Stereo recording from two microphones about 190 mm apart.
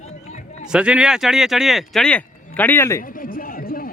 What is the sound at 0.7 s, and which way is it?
Speech, 5° right (ahead or behind).